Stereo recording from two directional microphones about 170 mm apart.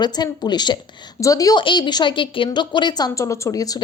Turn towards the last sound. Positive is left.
turn(degrees=20)  # may be behind; listen again after turning